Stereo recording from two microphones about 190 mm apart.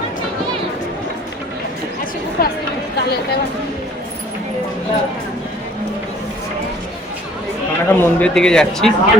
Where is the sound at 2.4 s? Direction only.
50° left (ahead or behind).